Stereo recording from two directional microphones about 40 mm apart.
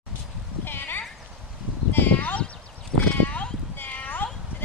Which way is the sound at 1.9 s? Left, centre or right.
Left.